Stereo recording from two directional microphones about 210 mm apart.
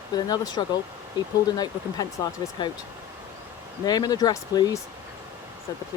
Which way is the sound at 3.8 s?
20° left (ahead or behind).